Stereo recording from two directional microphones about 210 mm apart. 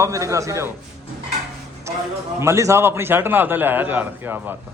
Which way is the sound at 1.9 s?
15° right (ahead or behind).